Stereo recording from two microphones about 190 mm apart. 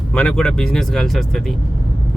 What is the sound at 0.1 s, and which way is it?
Speech, 5° left (ahead or behind).